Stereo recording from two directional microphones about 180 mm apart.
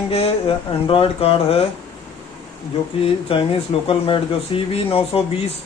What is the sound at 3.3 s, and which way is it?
Speech, 30° left (ahead or behind).